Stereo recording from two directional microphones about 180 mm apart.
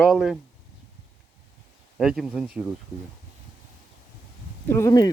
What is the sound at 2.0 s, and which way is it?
Speech, centre (ahead or behind).